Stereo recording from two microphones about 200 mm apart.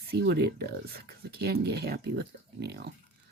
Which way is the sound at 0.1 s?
55° right (ahead or behind).